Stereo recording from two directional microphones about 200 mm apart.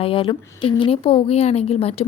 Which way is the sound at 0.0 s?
25° left (ahead or behind).